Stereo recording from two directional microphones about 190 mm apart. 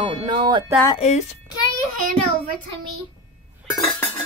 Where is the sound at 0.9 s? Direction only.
35° left (ahead or behind).